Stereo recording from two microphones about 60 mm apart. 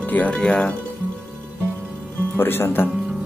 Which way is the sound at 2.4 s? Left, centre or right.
Left.